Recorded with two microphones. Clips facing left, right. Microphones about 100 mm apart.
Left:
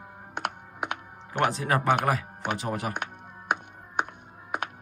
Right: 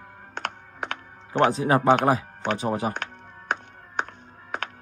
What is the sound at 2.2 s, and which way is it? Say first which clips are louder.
Music: right 4 dB; 15° left (ahead or behind).